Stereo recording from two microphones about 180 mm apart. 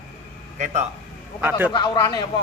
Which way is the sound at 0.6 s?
40° right (ahead or behind).